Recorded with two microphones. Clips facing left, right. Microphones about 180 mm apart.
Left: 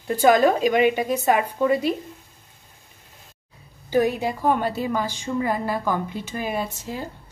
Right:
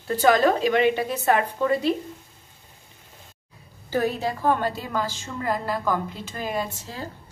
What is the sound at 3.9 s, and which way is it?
A woman's voice, 15° left (ahead or behind).